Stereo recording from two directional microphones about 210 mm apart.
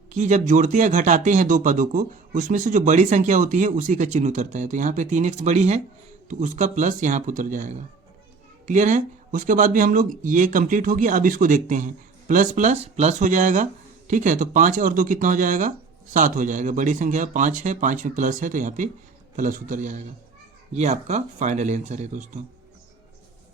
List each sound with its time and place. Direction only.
0.1 s speech: 35° right (ahead or behind)